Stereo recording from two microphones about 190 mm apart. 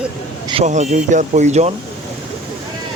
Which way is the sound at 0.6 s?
40° right (ahead or behind).